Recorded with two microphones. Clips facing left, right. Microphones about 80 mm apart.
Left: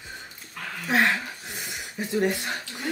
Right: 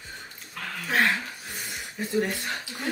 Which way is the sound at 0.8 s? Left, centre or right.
Centre.